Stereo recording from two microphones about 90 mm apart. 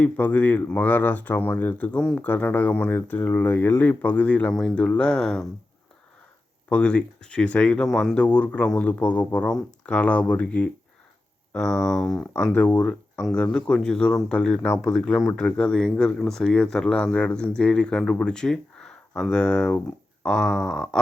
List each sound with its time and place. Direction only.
0.0 s speech: 15° left (ahead or behind)
6.7 s speech: 15° left (ahead or behind)
12.2 s speech: 15° left (ahead or behind)